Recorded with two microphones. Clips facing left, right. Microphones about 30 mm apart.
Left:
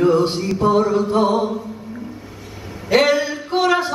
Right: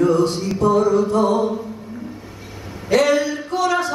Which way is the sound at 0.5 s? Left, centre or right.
Left.